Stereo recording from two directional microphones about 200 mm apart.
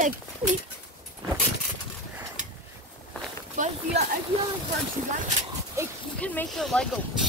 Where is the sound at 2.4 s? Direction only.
40° right (ahead or behind).